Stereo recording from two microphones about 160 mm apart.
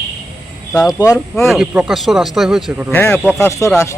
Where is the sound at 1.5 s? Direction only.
5° right (ahead or behind).